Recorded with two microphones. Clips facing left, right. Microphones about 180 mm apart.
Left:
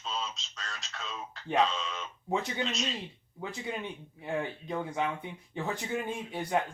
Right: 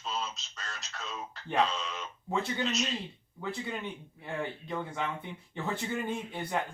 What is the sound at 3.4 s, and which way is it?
Speech, 15° left (ahead or behind).